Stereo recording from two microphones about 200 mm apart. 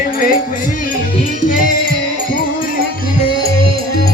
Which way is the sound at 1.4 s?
40° left (ahead or behind).